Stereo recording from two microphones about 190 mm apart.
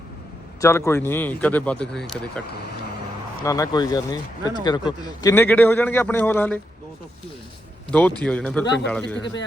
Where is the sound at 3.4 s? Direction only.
20° left (ahead or behind).